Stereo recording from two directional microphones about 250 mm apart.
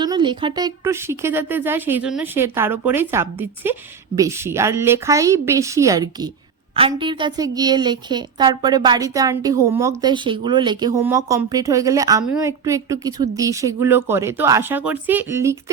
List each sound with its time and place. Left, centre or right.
0.0 s speech: centre